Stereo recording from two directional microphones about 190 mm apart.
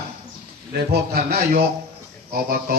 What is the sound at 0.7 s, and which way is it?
Speech, 55° right (ahead or behind).